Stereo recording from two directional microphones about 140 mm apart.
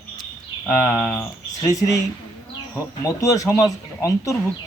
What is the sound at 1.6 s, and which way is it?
Speech, 25° left (ahead or behind).